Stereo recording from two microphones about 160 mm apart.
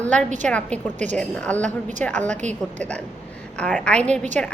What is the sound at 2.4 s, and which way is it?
Speech, 45° right (ahead or behind).